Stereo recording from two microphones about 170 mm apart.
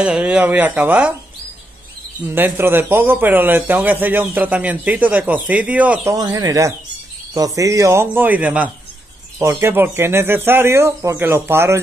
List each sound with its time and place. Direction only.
0.0 s a man's voice: 5° right (ahead or behind)
2.2 s a man's voice: 10° right (ahead or behind)
6.1 s a man's voice: 20° right (ahead or behind)